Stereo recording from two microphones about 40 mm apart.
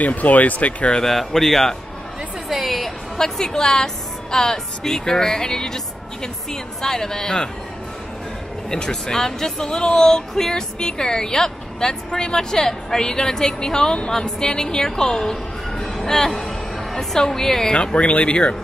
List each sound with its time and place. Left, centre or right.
0.0 s speech: left
1.0 s speech: centre
2.5 s music: centre
3.3 s speech: centre
8.6 s speech: centre
15.8 s music: centre
17.7 s speech: left